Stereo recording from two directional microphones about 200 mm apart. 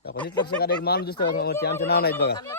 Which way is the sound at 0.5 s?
50° left (ahead or behind).